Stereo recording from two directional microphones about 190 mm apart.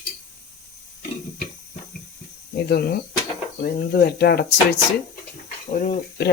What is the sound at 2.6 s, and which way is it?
Speech, 55° left (ahead or behind).